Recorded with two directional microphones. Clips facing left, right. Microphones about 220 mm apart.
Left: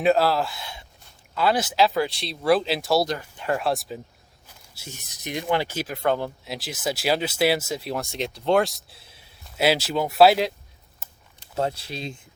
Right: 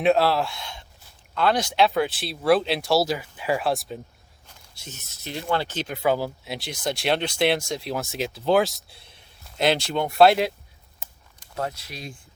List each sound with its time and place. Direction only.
0.0 s speech: centre (ahead or behind)
6.0 s speech: 5° right (ahead or behind)
11.5 s speech: 30° left (ahead or behind)